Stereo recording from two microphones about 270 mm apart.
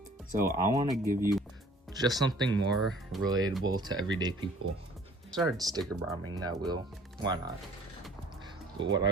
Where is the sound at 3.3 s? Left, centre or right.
Centre.